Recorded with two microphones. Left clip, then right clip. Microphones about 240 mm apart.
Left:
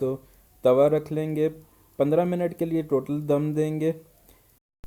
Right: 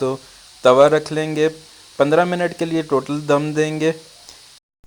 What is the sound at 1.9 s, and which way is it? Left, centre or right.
Speech, right.